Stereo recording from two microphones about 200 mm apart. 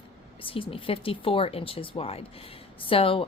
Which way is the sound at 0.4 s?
25° left (ahead or behind).